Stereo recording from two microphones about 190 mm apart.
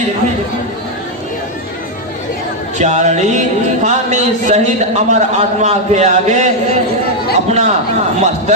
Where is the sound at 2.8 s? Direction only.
40° right (ahead or behind).